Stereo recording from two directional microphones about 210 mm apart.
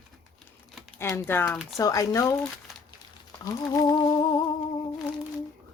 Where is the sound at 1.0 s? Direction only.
10° left (ahead or behind).